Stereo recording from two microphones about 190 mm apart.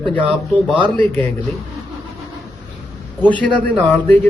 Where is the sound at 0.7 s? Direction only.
25° right (ahead or behind).